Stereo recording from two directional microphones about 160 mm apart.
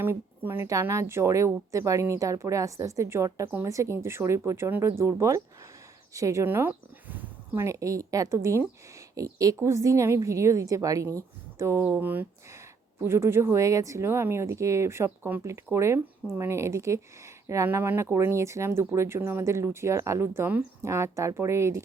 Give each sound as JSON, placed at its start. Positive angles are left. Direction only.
{"t": 0.0, "sound": "speech", "side_deg": -15}